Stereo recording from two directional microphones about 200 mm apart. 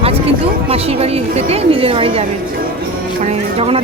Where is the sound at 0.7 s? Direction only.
30° right (ahead or behind).